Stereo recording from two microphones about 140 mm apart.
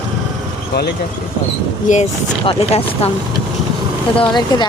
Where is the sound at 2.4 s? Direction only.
40° left (ahead or behind).